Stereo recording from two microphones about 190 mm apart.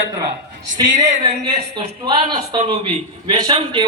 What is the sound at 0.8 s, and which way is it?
A man's voice, 20° right (ahead or behind).